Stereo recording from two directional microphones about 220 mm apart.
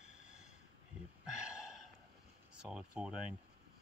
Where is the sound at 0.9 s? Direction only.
5° right (ahead or behind).